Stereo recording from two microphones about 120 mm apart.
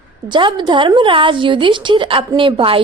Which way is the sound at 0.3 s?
40° right (ahead or behind).